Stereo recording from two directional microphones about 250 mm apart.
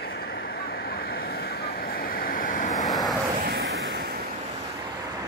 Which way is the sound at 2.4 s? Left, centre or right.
Left.